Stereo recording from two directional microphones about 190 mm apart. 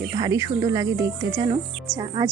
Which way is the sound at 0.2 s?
15° right (ahead or behind).